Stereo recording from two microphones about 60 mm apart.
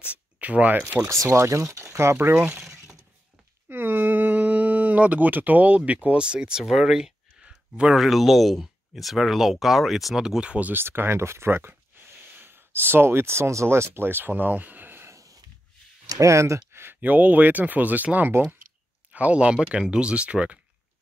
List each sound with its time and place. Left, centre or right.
0.1 s speech: right
1.0 s speech: right
2.1 s speech: right
2.6 s a sound: centre
3.6 s a sound: right
6.0 s speech: centre
10.7 s speech: right
15.0 s a sound: right
16.1 s speech: right
17.0 s speech: right